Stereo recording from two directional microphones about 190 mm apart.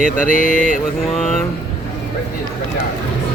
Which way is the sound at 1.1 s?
Centre (ahead or behind).